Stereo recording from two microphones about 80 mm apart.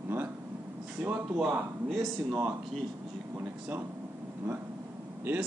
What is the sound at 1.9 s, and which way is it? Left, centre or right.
Speech, centre.